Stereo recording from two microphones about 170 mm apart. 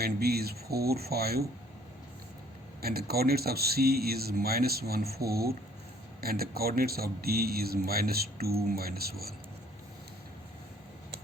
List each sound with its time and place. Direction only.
0.0 s speech: 65° right (ahead or behind)
2.8 s speech: 65° right (ahead or behind)